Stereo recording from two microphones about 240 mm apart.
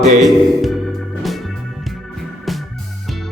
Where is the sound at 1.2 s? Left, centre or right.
Centre.